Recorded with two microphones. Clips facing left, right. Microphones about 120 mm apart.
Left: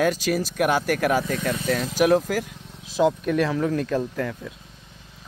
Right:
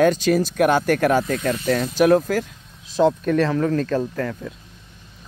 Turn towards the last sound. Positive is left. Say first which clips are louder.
# right 2 dB
turn(degrees=5)  # may be behind; listen again after turning